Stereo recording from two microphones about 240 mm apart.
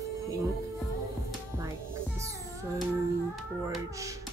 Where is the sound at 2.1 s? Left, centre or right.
Centre.